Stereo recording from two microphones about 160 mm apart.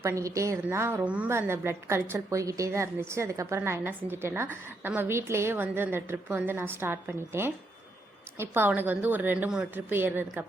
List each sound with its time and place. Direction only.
0.0 s a woman's voice: 20° right (ahead or behind)